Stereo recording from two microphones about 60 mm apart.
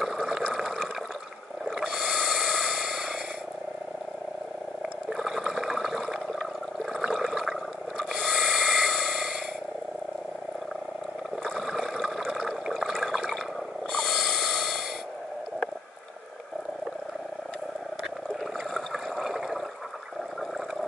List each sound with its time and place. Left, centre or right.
0.0 s water: centre
1.8 s whale vocalization: centre
2.5 s a sound: centre
5.1 s water: centre
8.0 s filing: centre
11.5 s water: centre
13.9 s snort: centre
18.7 s water: centre